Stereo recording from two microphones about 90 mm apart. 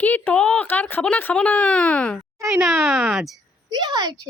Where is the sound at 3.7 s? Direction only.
50° right (ahead or behind).